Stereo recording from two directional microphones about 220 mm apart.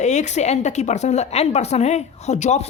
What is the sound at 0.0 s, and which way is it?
Speech, 30° left (ahead or behind).